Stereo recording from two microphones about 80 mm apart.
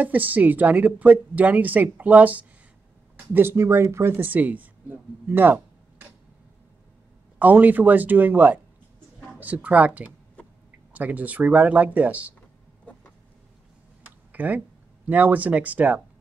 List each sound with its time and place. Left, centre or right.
0.0 s speech: right
3.3 s speech: right
7.3 s speech: right
14.3 s a sound: right
15.0 s speech: right